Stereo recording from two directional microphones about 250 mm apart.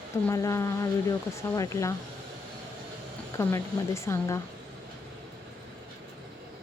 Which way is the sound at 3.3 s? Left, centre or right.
Centre.